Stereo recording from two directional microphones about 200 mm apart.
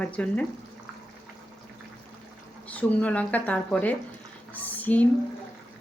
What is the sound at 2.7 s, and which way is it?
Speech, 5° left (ahead or behind).